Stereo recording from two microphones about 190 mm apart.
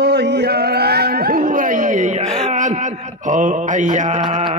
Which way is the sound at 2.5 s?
40° right (ahead or behind).